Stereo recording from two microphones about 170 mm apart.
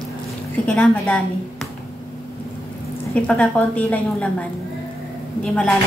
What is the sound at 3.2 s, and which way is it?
A woman's voice, 10° left (ahead or behind).